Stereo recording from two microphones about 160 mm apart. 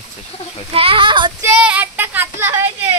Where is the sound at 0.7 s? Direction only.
35° right (ahead or behind).